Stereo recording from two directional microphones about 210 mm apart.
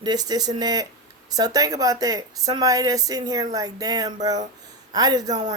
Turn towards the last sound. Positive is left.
turn(degrees=-20)  # may be behind; listen again after turning